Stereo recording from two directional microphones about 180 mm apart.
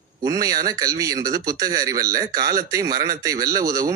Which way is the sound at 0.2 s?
20° right (ahead or behind).